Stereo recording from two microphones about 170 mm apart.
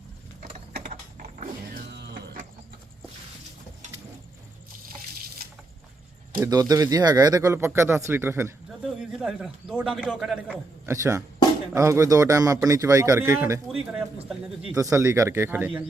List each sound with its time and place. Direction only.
0.9 s mechanisms: 50° right (ahead or behind)
1.9 s music: 85° right
6.4 s speech: 20° right (ahead or behind)
9.0 s a man's voice: 5° right (ahead or behind)